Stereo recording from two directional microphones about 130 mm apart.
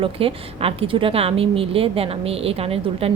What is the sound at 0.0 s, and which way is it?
A woman's voice, 45° right (ahead or behind).